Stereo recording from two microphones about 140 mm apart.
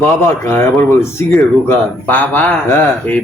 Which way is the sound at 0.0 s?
15° left (ahead or behind).